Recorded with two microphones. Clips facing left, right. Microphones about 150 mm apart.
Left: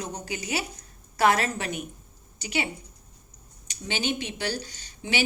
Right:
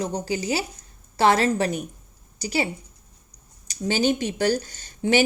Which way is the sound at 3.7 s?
40° right (ahead or behind).